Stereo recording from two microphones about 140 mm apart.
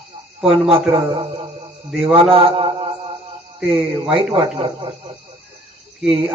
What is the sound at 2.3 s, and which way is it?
Speech, 40° right (ahead or behind).